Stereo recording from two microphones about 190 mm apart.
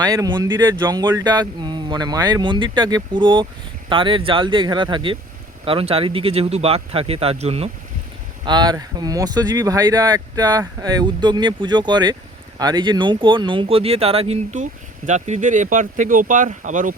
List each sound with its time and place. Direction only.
0.0 s speech: 20° right (ahead or behind)
8.4 s speech: 20° right (ahead or behind); by 16.9 s 40° right (ahead or behind)